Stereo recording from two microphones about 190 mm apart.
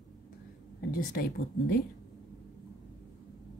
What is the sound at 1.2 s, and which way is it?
Speech, 50° left (ahead or behind).